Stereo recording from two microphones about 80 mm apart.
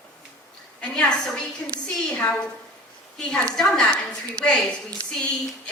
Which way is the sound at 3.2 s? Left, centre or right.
Centre.